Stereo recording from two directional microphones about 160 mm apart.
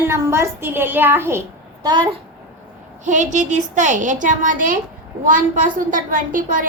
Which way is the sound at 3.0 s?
50° right (ahead or behind).